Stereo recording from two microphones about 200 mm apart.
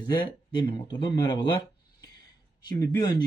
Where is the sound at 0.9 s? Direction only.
20° left (ahead or behind).